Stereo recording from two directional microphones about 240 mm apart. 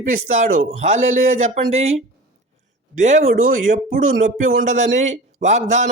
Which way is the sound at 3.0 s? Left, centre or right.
Right.